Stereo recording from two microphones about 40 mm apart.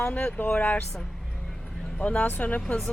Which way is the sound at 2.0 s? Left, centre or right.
Left.